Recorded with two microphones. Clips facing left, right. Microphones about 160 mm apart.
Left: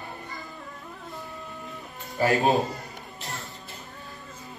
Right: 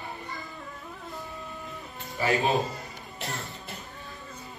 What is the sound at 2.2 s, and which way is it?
Speech, 40° left (ahead or behind).